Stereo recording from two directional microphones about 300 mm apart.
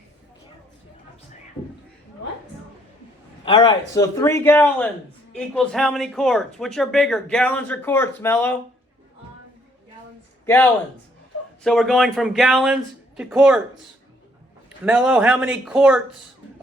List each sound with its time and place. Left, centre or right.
3.4 s a man's voice: centre
10.4 s speech: centre
14.8 s speech: centre